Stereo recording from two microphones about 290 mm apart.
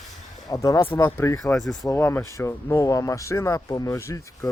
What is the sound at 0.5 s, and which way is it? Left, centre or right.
Speech, centre.